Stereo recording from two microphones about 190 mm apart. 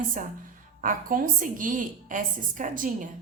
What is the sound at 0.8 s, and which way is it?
A woman's voice, 45° right (ahead or behind).